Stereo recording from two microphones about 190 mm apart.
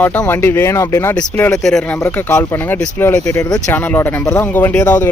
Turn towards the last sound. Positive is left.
turn(degrees=10)  # may be behind; listen again after turning